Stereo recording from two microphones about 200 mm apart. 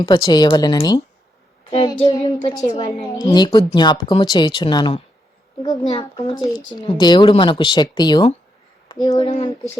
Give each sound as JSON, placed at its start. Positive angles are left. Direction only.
{"t": 0.0, "sound": "speech", "side_deg": 25}